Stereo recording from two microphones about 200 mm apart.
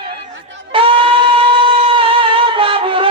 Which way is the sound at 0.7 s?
25° right (ahead or behind).